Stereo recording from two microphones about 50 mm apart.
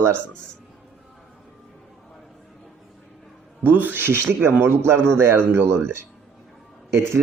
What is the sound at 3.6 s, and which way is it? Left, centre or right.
Speech, right.